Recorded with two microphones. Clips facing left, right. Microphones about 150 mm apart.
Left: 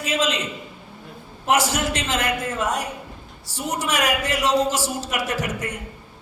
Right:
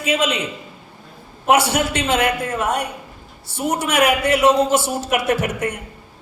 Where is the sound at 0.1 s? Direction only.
65° right (ahead or behind).